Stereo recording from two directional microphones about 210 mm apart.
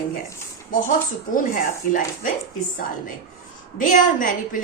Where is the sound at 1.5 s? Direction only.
40° left (ahead or behind).